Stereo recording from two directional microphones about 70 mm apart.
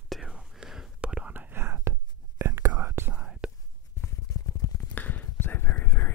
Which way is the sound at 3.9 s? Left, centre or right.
Left.